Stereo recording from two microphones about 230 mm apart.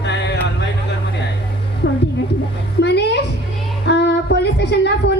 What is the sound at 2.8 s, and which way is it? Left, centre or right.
Music, left.